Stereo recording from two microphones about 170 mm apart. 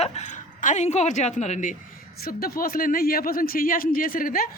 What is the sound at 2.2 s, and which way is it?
A woman's voice, 60° left (ahead or behind).